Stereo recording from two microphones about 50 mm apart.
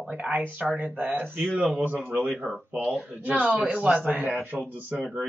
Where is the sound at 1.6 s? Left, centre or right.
Centre.